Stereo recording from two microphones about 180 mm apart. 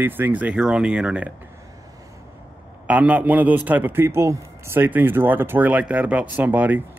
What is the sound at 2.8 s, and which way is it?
A man's voice, 5° right (ahead or behind).